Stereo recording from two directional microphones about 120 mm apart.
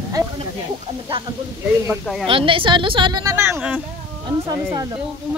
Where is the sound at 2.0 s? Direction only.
Centre (ahead or behind).